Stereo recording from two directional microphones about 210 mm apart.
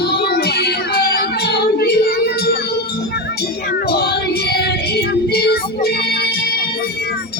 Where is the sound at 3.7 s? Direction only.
50° left (ahead or behind).